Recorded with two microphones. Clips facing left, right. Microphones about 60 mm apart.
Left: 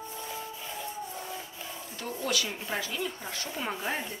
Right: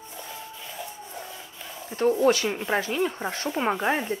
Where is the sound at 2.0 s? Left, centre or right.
Right.